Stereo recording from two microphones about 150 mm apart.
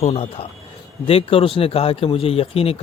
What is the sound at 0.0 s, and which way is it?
Speech, 45° left (ahead or behind).